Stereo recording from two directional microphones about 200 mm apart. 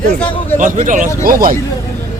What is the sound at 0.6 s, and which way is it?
Speech, 40° right (ahead or behind).